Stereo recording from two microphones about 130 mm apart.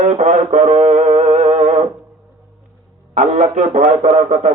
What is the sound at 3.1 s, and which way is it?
A man's voice, 65° right (ahead or behind).